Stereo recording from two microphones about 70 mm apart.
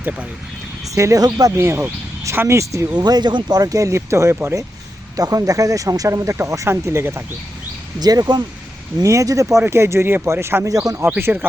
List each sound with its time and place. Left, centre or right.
0.9 s speech: right
1.2 s speech: right
1.5 s speech: right
2.9 s speech: right
5.1 s speech: right
7.9 s speech: right
9.0 s speech: right
9.6 s speech: right
10.7 s speech: right
11.2 s speech: right